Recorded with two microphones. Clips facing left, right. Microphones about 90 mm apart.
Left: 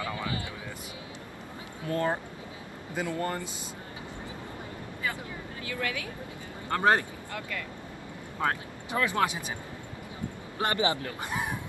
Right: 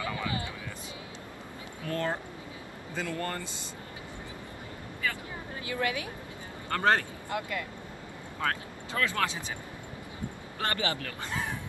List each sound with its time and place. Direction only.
0.0 s vehicle: 30° left (ahead or behind)
1.9 s speech: 15° left (ahead or behind)
5.7 s speech: 25° right (ahead or behind)
6.7 s speech: 15° left (ahead or behind)
7.2 s speech: 25° right (ahead or behind)
8.4 s speech: 20° left (ahead or behind)
10.6 s speech: 20° left (ahead or behind)